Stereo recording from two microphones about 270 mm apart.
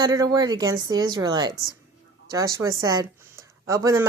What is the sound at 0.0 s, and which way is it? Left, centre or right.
A woman's voice, centre.